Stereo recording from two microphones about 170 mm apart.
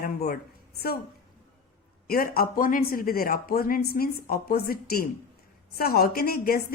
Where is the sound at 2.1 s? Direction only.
60° left (ahead or behind).